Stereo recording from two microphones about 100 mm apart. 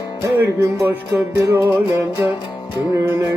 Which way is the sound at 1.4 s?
30° right (ahead or behind).